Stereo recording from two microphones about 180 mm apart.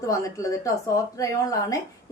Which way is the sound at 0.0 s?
20° left (ahead or behind).